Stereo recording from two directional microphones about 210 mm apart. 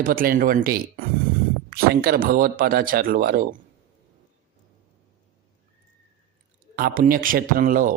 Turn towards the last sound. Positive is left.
turn(degrees=-40)  # may be behind; listen again after turning